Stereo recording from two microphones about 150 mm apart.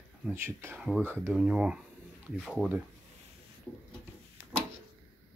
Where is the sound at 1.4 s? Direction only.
5° right (ahead or behind).